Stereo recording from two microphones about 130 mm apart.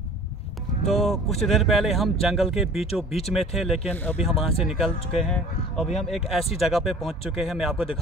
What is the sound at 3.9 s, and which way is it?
Speech, 15° left (ahead or behind).